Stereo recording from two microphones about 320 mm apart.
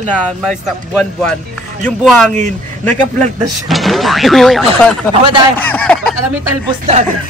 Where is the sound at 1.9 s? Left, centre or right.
Centre.